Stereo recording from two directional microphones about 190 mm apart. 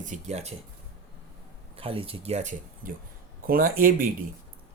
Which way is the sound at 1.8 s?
30° right (ahead or behind).